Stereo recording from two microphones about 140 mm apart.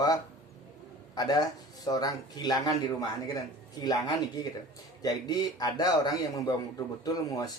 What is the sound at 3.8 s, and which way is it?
A man's voice, 30° left (ahead or behind).